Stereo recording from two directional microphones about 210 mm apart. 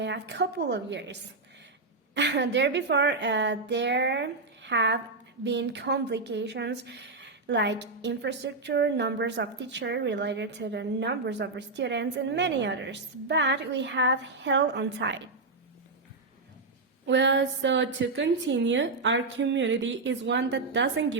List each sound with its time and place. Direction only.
0.0 s a woman's voice: 55° right (ahead or behind)
2.1 s a woman's voice: 55° right (ahead or behind)
17.1 s a woman's voice: 60° right (ahead or behind)